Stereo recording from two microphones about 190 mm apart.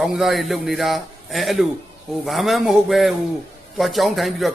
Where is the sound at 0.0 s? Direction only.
Centre (ahead or behind).